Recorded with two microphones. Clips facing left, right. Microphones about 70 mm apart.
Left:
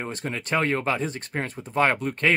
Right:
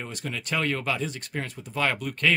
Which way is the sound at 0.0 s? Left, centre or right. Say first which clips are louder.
Left 4 dB; left.